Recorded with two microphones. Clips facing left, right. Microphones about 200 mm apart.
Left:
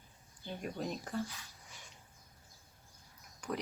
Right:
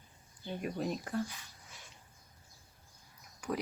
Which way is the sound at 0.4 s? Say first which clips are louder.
Right 3 dB; centre (ahead or behind).